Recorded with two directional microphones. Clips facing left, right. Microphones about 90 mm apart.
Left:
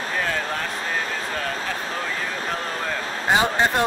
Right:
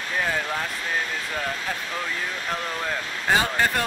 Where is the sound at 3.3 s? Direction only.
20° left (ahead or behind).